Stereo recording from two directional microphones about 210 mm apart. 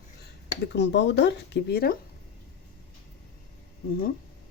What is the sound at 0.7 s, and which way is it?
Speech, 55° left (ahead or behind).